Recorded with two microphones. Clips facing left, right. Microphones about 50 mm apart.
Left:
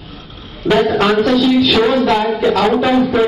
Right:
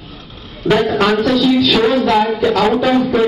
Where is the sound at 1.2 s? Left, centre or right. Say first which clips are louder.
Left 1 dB; left.